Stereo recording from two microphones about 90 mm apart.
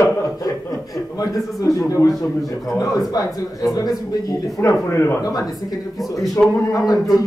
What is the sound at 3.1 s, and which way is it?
Speech, 45° left (ahead or behind).